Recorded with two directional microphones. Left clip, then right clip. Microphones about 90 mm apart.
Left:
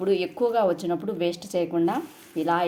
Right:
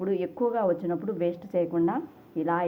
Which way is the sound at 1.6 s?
35° left (ahead or behind).